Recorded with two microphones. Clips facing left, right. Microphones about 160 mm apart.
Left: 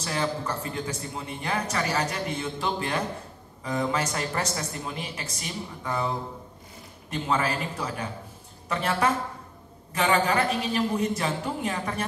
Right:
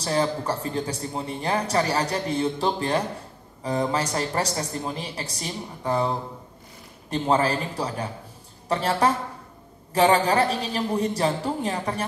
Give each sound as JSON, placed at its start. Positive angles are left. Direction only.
{"t": 0.0, "sound": "speech", "side_deg": -35}
{"t": 7.1, "sound": "speech", "side_deg": -35}